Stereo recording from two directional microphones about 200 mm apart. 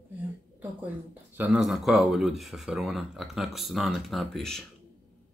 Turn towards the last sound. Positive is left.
turn(degrees=0)  # may be behind; listen again after turning